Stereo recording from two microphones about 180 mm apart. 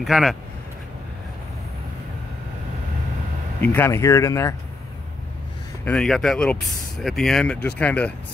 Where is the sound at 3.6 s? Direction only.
10° left (ahead or behind).